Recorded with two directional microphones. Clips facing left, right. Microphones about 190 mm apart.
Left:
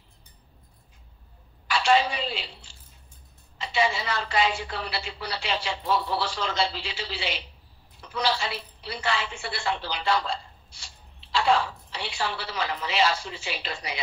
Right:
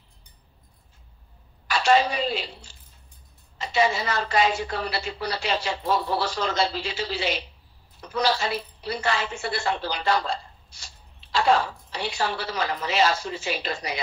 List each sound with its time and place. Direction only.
1.7 s a woman's voice: 45° right (ahead or behind)